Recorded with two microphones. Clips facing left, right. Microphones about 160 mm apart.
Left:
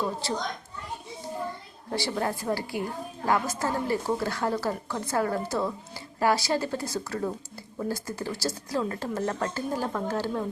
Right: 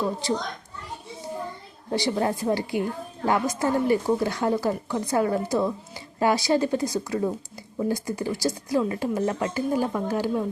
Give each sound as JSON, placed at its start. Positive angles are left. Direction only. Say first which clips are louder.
{"t": 0.2, "sound": "a woman's voice", "louder": "right 5 dB", "side_deg": -15}
{"t": 1.9, "sound": "a woman's voice", "louder": "right 4 dB", "side_deg": -20}